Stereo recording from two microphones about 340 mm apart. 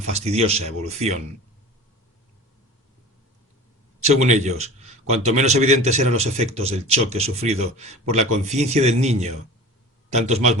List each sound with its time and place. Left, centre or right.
0.3 s a man's voice: centre
4.2 s a man's voice: centre